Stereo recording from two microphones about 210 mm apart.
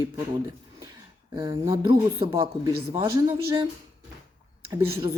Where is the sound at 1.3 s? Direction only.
20° right (ahead or behind).